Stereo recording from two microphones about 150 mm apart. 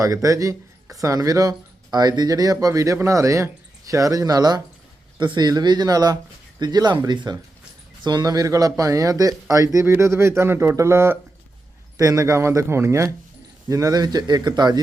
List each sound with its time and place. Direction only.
0.0 s speech: 20° right (ahead or behind)